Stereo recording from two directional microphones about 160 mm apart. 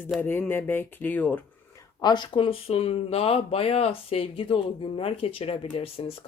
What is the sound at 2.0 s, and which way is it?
Speech, 25° left (ahead or behind).